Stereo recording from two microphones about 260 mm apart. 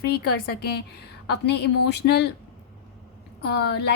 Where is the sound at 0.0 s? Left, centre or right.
Left.